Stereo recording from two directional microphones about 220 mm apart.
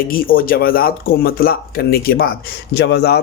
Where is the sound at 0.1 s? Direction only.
40° left (ahead or behind).